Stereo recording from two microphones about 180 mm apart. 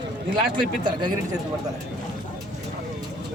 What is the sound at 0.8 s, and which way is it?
Speech, 25° right (ahead or behind).